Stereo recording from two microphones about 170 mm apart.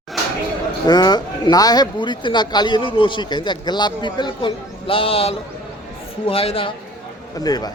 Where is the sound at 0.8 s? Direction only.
25° left (ahead or behind).